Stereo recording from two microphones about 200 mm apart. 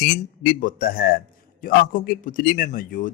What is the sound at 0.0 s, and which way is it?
Speech, 45° left (ahead or behind).